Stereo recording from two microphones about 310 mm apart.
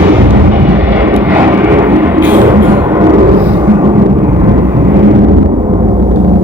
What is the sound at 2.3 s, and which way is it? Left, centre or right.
Music, centre.